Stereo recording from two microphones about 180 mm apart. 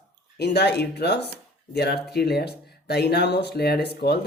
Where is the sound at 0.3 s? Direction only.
65° left (ahead or behind).